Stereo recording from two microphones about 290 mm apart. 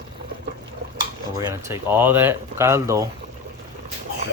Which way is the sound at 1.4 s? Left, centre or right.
Centre.